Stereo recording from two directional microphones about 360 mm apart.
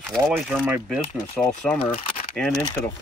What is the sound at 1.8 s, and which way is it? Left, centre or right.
Speech, centre.